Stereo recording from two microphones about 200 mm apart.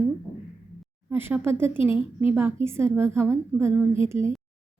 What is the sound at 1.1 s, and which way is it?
A woman's voice, 10° right (ahead or behind).